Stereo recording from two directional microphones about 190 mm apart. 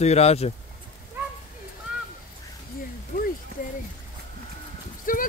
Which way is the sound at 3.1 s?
50° left (ahead or behind).